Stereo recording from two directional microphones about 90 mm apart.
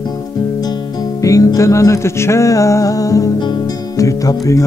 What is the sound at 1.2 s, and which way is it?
Music, 40° left (ahead or behind).